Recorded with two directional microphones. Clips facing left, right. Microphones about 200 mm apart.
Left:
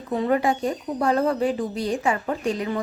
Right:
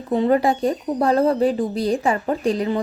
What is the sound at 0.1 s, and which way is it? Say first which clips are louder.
A woman's voice: right 4 dB; 30° right (ahead or behind).